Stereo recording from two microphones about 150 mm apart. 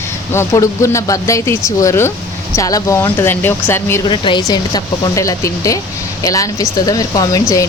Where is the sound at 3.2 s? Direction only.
15° left (ahead or behind).